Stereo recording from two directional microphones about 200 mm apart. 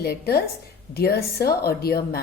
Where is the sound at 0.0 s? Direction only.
50° left (ahead or behind).